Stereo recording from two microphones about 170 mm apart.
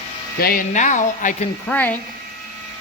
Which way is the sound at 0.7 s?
45° left (ahead or behind).